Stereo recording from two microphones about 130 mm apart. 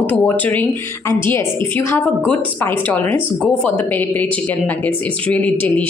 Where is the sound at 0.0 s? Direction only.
10° left (ahead or behind).